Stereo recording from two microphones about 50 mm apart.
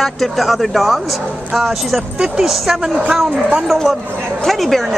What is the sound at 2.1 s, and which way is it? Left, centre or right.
Speech, centre.